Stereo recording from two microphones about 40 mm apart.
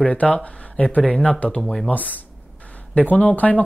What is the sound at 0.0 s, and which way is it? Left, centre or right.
Speech, left.